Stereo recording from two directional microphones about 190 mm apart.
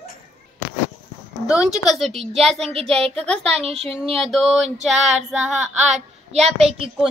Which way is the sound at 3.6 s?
30° right (ahead or behind).